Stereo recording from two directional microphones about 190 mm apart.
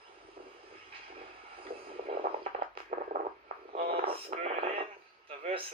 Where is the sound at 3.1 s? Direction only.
40° right (ahead or behind).